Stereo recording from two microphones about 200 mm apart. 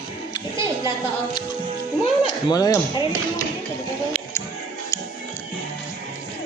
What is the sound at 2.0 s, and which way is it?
Speech, 20° left (ahead or behind).